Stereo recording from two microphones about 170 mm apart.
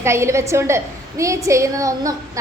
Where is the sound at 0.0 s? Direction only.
15° right (ahead or behind).